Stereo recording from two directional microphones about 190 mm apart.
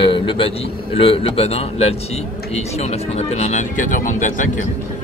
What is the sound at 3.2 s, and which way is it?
Speech, 35° left (ahead or behind).